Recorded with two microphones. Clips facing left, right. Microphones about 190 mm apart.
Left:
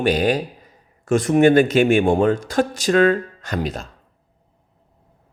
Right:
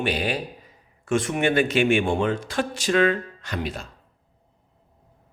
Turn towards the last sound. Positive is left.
turn(degrees=40)  # may be behind; listen again after turning